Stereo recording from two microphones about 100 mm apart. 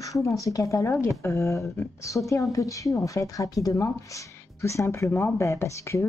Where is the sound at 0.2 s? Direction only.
35° left (ahead or behind).